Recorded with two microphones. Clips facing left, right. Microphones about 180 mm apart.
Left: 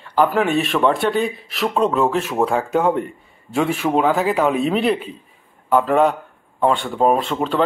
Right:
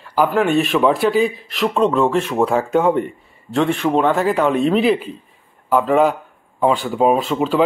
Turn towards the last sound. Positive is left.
turn(degrees=-5)  # may be behind; listen again after turning